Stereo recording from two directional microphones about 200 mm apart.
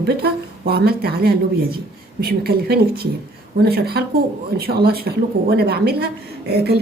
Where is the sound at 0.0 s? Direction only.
55° right (ahead or behind).